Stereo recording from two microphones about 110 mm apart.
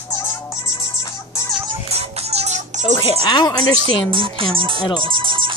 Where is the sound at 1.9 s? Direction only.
70° right (ahead or behind); by 2.8 s 90° right.